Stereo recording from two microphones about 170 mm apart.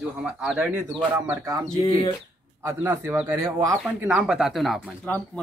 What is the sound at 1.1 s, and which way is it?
Speech, 15° right (ahead or behind).